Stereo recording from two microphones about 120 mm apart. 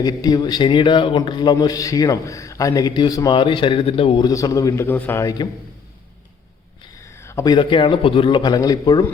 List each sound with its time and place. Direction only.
0.0 s speech: 35° left (ahead or behind); by 4.3 s 50° left (ahead or behind)
4.3 s a man's voice: 30° left (ahead or behind)
5.2 s speech: 35° left (ahead or behind)
7.0 s a sound: 25° left (ahead or behind)
7.5 s speech: 45° left (ahead or behind)